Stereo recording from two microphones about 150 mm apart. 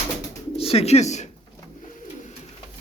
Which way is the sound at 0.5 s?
40° left (ahead or behind).